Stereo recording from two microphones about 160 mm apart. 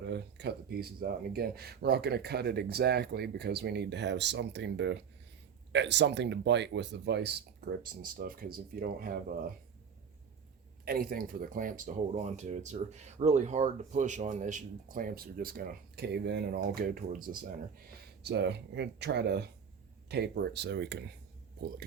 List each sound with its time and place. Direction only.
0.0 s speech: 90° right; by 9.5 s 65° right (ahead or behind)
10.8 s speech: 65° right (ahead or behind)
18.2 s speech: 90° right